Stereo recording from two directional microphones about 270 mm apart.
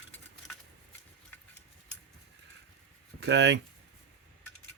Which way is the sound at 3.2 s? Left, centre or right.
Right.